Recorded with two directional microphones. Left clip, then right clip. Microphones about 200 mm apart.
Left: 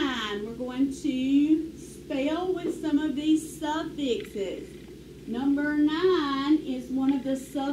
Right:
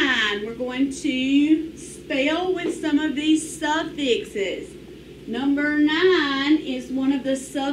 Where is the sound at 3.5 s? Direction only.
25° right (ahead or behind).